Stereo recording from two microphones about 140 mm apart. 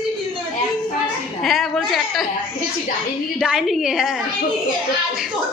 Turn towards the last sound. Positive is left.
turn(degrees=-5)  # may be behind; listen again after turning